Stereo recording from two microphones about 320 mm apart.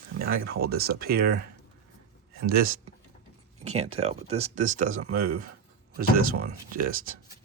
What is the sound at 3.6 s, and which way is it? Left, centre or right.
Speech, centre.